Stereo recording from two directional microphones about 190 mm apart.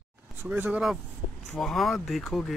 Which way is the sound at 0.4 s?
10° right (ahead or behind).